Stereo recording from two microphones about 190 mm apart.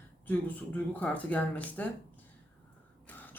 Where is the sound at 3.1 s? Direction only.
10° left (ahead or behind).